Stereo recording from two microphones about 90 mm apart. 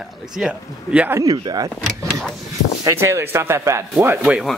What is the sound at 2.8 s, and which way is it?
Speech, 30° right (ahead or behind).